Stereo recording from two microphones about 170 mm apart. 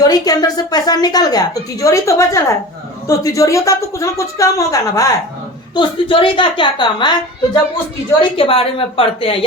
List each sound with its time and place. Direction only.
0.0 s a woman's voice: 20° left (ahead or behind)
5.7 s a woman's voice: 30° left (ahead or behind)